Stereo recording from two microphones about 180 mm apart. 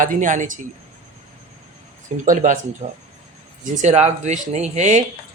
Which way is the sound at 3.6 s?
40° right (ahead or behind).